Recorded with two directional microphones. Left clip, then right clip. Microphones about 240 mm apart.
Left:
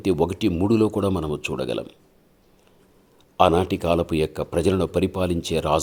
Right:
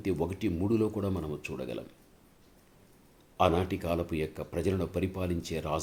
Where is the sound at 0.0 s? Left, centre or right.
Left.